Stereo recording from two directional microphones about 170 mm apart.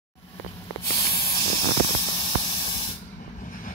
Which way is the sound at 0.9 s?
30° left (ahead or behind).